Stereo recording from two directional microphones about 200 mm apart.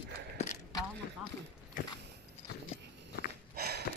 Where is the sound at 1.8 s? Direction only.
45° left (ahead or behind).